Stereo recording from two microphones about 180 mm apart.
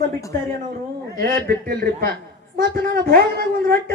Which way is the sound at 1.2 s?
55° right (ahead or behind).